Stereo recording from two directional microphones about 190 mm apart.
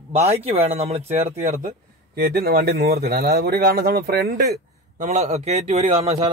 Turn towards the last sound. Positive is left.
turn(degrees=-30)  # may be behind; listen again after turning